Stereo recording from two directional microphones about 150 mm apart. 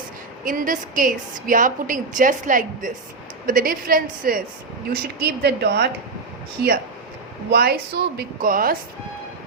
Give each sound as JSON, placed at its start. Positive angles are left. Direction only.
{"t": 0.4, "sound": "a woman's voice", "side_deg": -65}
{"t": 4.9, "sound": "a woman's voice", "side_deg": -90}
{"t": 7.5, "sound": "a woman's voice", "side_deg": -90}